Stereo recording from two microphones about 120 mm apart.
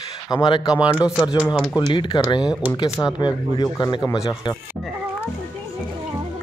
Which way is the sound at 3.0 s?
15° left (ahead or behind).